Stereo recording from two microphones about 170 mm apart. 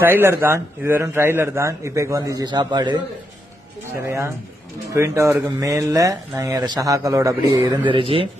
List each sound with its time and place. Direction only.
0.0 s a man's voice: 15° right (ahead or behind)
4.0 s a man's voice: 15° right (ahead or behind); by 8.3 s 30° right (ahead or behind)